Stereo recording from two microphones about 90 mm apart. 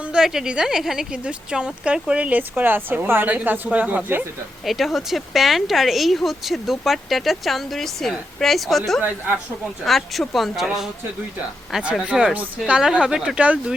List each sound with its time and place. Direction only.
0.0 s speech: 10° right (ahead or behind)
4.6 s speech: centre (ahead or behind)
9.0 s speech: 20° right (ahead or behind)
9.8 s speech: centre (ahead or behind)